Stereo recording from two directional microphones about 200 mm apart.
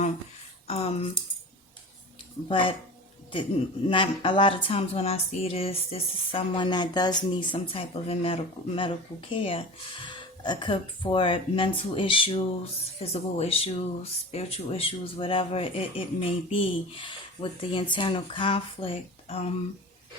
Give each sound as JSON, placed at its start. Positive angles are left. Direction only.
{"t": 0.7, "sound": "speech", "side_deg": 30}
{"t": 2.5, "sound": "speech", "side_deg": 25}